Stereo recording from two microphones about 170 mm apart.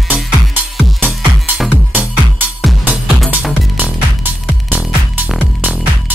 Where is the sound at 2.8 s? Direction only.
5° right (ahead or behind).